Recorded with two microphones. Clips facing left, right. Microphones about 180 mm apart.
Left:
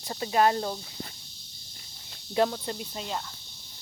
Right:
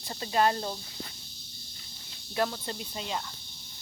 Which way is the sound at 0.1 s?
15° left (ahead or behind).